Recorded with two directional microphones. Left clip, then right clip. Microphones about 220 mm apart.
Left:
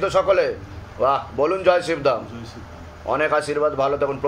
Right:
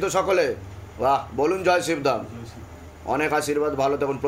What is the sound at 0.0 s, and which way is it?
A man's voice, 40° right (ahead or behind).